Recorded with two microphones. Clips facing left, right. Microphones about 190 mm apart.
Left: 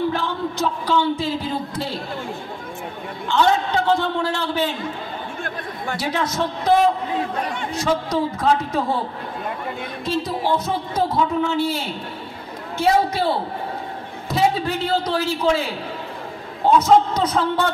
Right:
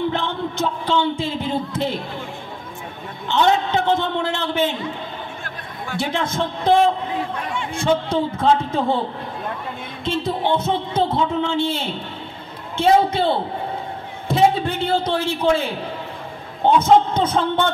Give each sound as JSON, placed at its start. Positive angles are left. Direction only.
{"t": 0.1, "sound": "a man's voice", "side_deg": -25}
{"t": 3.3, "sound": "speech", "side_deg": -20}
{"t": 5.9, "sound": "speech", "side_deg": -25}
{"t": 10.0, "sound": "speech", "side_deg": -25}